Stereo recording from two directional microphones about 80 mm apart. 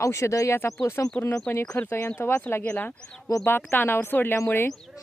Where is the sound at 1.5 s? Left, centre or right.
Centre.